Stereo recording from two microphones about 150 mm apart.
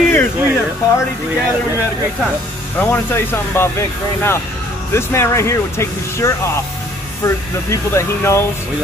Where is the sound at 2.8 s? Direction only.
15° left (ahead or behind).